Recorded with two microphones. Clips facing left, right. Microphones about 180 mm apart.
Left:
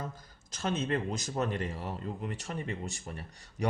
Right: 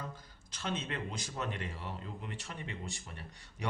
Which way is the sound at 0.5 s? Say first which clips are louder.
Left 7 dB; 45° left (ahead or behind).